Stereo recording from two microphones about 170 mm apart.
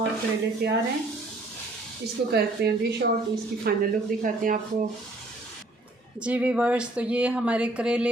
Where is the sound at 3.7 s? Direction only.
65° right (ahead or behind).